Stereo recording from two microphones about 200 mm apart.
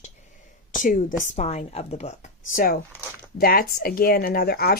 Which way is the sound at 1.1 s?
35° left (ahead or behind).